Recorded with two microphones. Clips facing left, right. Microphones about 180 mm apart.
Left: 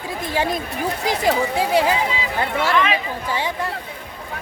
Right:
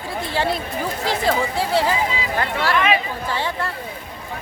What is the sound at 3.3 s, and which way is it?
Speech, 15° left (ahead or behind).